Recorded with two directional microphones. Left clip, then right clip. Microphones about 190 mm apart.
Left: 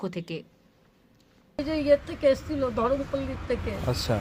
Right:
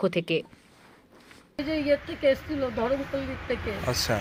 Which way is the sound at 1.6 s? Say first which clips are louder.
Left 3 dB; 20° left (ahead or behind).